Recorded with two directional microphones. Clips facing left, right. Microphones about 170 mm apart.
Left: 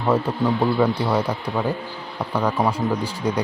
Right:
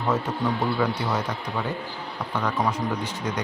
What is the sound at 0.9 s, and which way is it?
Speech, 30° left (ahead or behind).